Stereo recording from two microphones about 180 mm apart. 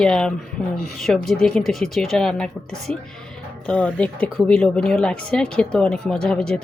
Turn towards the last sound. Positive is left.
turn(degrees=5)  # may be behind; listen again after turning